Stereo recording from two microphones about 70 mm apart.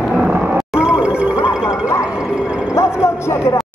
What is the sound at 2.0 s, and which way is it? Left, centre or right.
Music, centre.